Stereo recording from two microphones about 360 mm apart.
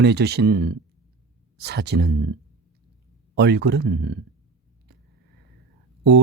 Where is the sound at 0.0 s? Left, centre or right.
Right.